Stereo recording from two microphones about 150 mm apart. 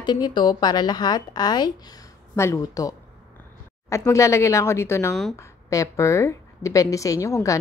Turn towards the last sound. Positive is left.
turn(degrees=20)  # may be behind; listen again after turning